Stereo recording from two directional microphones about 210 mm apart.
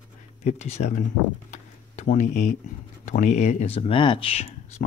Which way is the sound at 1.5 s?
35° left (ahead or behind).